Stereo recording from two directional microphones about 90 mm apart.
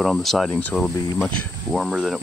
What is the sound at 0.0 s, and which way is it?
Speech, centre (ahead or behind).